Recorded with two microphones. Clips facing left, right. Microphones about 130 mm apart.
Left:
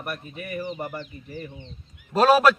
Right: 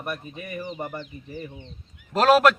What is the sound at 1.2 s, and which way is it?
Speech, 10° right (ahead or behind).